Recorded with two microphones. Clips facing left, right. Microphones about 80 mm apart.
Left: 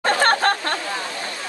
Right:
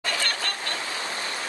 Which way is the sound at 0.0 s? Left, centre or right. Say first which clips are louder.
Left 12 dB; left.